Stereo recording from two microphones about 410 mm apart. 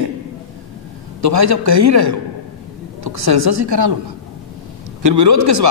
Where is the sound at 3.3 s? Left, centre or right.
Right.